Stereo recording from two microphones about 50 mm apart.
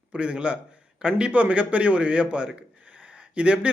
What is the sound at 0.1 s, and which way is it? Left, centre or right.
Speech, right.